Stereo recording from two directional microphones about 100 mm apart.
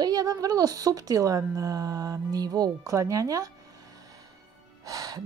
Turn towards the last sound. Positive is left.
turn(degrees=-35)  # may be behind; listen again after turning